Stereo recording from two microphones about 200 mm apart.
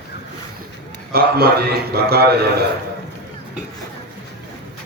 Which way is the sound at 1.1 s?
50° right (ahead or behind).